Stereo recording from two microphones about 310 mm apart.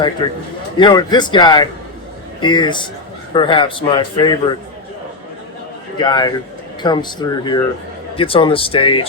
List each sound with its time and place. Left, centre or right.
0.8 s speech: centre
6.0 s speech: centre